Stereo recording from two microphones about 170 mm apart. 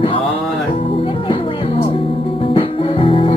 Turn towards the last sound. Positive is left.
turn(degrees=30)  # may be behind; listen again after turning